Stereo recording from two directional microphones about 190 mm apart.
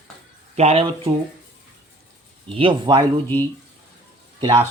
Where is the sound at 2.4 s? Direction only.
30° right (ahead or behind).